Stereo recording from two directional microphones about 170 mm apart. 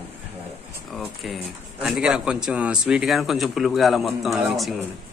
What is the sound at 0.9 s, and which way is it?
A man's voice, centre (ahead or behind).